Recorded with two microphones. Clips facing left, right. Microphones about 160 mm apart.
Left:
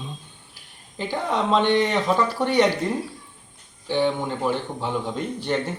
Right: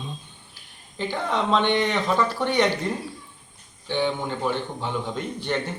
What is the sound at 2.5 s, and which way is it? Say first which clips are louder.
Speech: left 4 dB; 5° left (ahead or behind).